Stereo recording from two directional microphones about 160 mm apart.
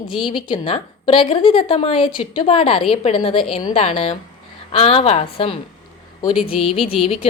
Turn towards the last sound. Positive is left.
turn(degrees=35)  # may be behind; listen again after turning